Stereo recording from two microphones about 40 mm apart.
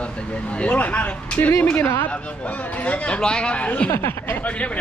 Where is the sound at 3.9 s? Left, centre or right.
Left.